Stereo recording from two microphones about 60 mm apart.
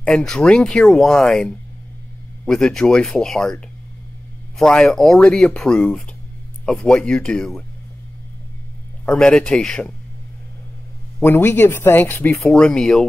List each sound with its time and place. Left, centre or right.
0.0 s speech: centre
4.6 s speech: centre
5.2 s speech: centre
9.1 s speech: centre
11.2 s speech: left
12.4 s speech: centre